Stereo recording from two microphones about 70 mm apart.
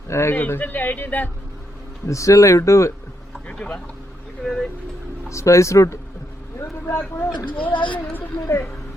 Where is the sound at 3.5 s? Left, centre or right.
Centre.